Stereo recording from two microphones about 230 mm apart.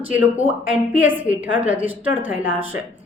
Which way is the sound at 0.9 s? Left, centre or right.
Centre.